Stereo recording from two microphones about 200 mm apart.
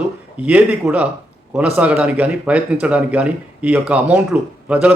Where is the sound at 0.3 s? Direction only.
5° right (ahead or behind).